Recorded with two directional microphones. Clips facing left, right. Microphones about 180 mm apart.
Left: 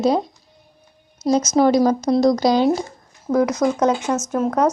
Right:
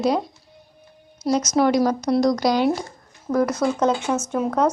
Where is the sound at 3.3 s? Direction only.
15° left (ahead or behind).